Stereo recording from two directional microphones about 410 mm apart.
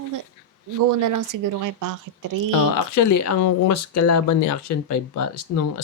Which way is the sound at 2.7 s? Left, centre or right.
Left.